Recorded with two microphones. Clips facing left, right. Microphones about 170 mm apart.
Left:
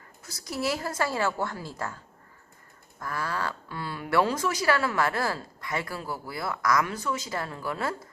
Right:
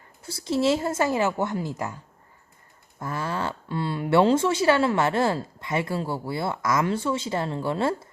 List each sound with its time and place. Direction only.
0.2 s speech: 30° right (ahead or behind)
3.0 s speech: 25° right (ahead or behind)